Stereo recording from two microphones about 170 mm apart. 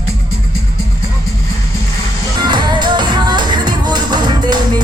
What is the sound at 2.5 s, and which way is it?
Music, 25° right (ahead or behind).